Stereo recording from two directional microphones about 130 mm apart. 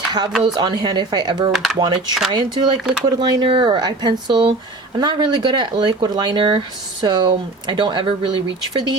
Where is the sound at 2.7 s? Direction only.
5° right (ahead or behind).